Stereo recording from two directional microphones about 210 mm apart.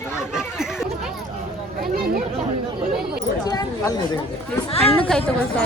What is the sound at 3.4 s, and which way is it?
Speech, 20° left (ahead or behind).